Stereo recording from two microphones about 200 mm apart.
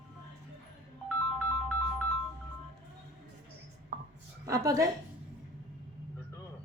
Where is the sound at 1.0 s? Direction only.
5° left (ahead or behind).